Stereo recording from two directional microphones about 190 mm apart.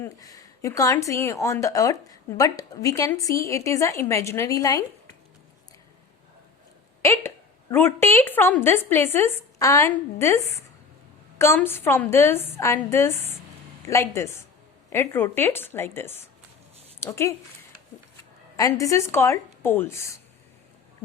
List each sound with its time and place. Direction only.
0.0 s a woman's voice: 20° left (ahead or behind)
7.0 s a woman's voice: 15° left (ahead or behind)
18.5 s a woman's voice: 15° left (ahead or behind)